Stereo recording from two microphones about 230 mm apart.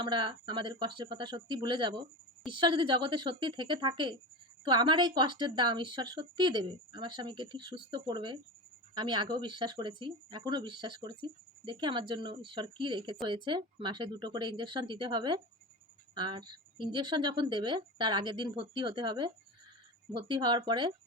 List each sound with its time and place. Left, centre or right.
0.0 s speech: right